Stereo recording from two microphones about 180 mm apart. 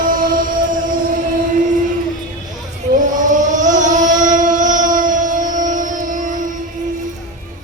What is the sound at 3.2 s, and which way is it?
Vehicle, 45° right (ahead or behind).